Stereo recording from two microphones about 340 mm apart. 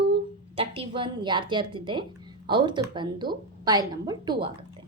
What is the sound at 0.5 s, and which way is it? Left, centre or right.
A woman's voice, centre.